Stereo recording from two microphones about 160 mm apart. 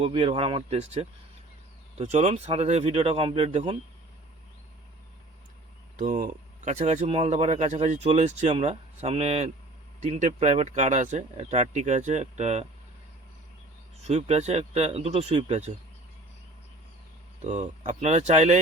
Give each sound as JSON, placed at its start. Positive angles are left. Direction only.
{"t": 0.0, "sound": "speech", "side_deg": -35}
{"t": 6.0, "sound": "speech", "side_deg": -55}
{"t": 14.0, "sound": "speech", "side_deg": -40}
{"t": 17.4, "sound": "speech", "side_deg": -45}